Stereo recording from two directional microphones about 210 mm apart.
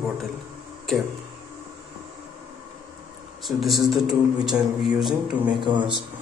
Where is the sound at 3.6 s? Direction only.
Centre (ahead or behind).